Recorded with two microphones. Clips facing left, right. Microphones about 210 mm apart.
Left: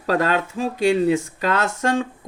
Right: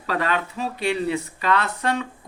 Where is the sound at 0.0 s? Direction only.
45° left (ahead or behind).